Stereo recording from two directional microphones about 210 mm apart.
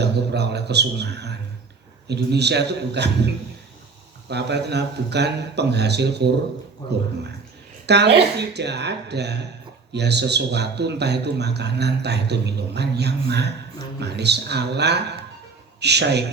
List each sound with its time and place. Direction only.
0.0 s a man's voice: 50° right (ahead or behind)
4.3 s a man's voice: 55° right (ahead or behind)
7.9 s a man's voice: 55° right (ahead or behind)